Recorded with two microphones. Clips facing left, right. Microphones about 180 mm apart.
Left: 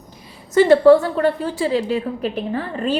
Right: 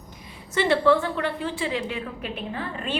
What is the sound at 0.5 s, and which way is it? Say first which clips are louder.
A woman's voice: left 9 dB; 40° left (ahead or behind).